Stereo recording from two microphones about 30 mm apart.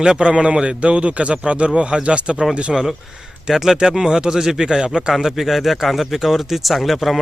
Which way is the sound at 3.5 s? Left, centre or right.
Centre.